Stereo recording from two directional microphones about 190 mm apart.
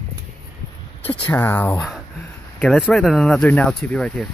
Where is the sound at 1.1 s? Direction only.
10° left (ahead or behind).